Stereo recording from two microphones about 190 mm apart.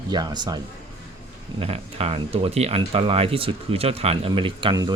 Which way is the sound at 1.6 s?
30° right (ahead or behind).